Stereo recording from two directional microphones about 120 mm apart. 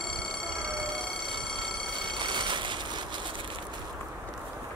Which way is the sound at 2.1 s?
40° right (ahead or behind).